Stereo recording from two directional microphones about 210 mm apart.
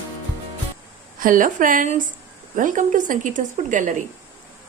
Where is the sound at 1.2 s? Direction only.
40° right (ahead or behind).